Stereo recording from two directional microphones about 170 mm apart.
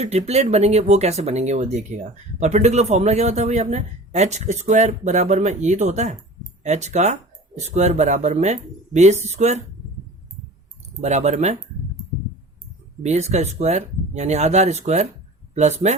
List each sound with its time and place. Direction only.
0.0 s a man's voice: 40° right (ahead or behind)
11.0 s speech: 40° right (ahead or behind)
13.0 s a man's voice: 40° right (ahead or behind)